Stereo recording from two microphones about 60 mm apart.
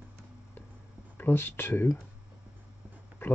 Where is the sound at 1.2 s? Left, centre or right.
Left.